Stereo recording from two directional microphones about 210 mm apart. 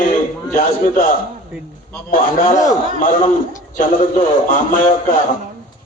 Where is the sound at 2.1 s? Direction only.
40° left (ahead or behind).